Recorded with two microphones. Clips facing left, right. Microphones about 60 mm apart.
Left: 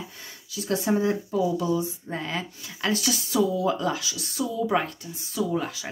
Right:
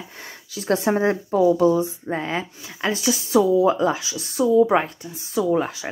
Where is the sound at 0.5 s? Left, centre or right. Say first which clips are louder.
Right 4 dB; right.